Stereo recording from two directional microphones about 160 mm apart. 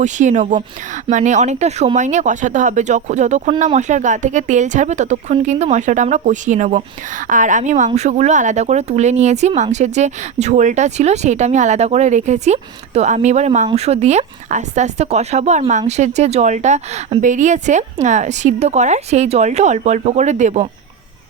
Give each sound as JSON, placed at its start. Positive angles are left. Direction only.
{"t": 0.0, "sound": "speech", "side_deg": -50}